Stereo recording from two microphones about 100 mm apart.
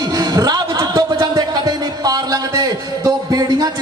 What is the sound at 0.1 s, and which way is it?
Music, 40° right (ahead or behind).